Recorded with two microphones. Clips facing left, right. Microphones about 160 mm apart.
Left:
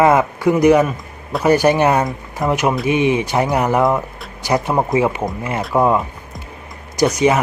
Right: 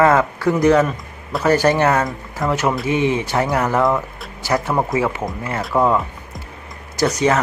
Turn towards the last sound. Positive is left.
turn(degrees=10)  # may be behind; listen again after turning